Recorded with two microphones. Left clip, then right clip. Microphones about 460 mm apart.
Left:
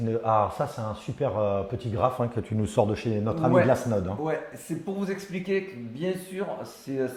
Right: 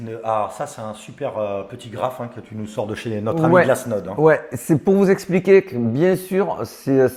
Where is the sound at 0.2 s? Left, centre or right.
Left.